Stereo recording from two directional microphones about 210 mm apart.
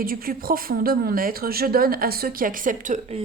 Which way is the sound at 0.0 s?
45° right (ahead or behind).